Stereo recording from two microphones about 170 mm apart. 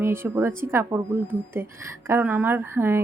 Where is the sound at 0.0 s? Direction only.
15° right (ahead or behind).